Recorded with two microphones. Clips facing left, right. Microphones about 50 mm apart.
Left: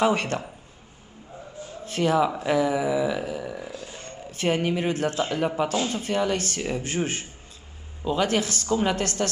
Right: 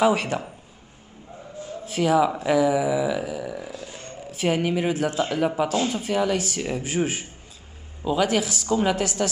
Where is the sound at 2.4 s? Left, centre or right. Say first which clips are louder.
Right 3 dB; centre.